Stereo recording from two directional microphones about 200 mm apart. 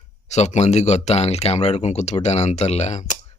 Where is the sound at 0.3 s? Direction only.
35° left (ahead or behind).